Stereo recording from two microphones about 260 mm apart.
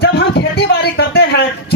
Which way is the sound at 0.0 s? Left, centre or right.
Left.